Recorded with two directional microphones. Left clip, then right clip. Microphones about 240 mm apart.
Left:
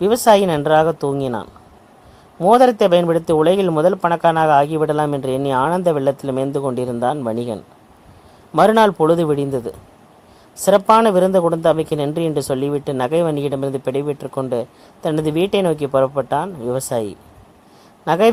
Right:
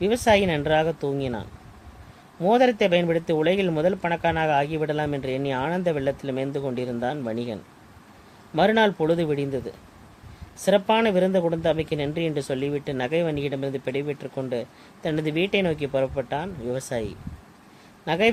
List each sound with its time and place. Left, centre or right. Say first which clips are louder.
0.0 s speech: left 7 dB; left